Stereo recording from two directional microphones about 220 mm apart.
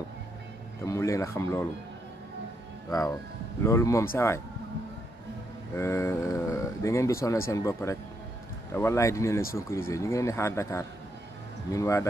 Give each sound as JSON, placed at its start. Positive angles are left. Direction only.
{"t": 0.8, "sound": "speech", "side_deg": 15}
{"t": 2.9, "sound": "speech", "side_deg": 15}
{"t": 5.8, "sound": "speech", "side_deg": 10}